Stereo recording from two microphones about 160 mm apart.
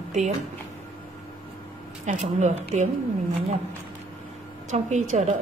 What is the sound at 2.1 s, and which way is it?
Speech, 45° right (ahead or behind).